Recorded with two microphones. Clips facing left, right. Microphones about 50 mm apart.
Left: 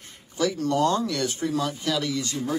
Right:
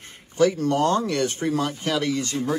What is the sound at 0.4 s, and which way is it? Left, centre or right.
A man's voice, right.